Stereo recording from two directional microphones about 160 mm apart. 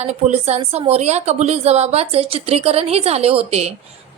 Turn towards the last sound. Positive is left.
turn(degrees=-40)  # may be behind; listen again after turning